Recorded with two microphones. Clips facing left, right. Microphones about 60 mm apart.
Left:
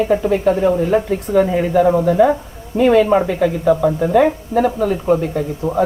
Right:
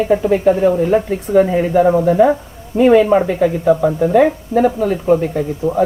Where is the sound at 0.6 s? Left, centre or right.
Centre.